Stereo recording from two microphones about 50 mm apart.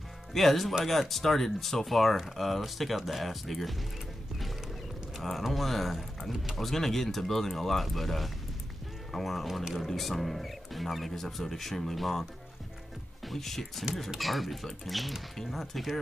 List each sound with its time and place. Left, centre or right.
0.3 s speech: centre
5.2 s speech: centre
13.3 s speech: centre